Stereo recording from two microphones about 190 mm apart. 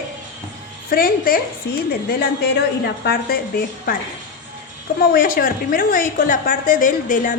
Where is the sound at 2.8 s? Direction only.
55° left (ahead or behind).